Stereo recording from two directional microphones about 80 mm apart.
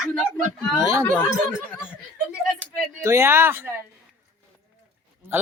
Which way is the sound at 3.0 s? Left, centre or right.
Right.